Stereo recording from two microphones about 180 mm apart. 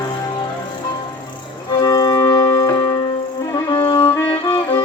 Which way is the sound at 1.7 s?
25° left (ahead or behind).